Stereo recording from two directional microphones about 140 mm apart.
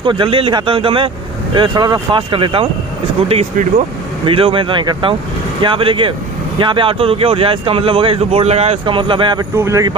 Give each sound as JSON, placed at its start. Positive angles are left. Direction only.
{"t": 0.0, "sound": "speech", "side_deg": -35}
{"t": 4.3, "sound": "speech", "side_deg": -40}
{"t": 9.6, "sound": "speech", "side_deg": -20}